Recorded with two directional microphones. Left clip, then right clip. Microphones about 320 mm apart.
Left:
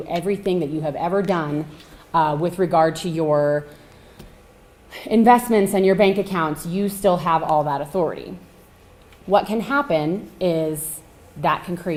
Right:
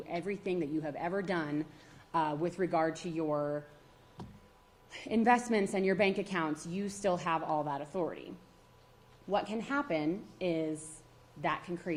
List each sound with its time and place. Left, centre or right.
0.1 s a woman's voice: left
3.2 s speech: left
4.9 s a woman's voice: left
9.3 s a woman's voice: left